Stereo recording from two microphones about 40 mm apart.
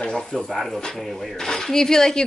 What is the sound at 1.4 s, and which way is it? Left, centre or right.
Speech, centre.